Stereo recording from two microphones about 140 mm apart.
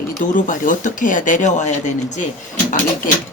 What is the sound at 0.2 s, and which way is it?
Speech, 70° left (ahead or behind).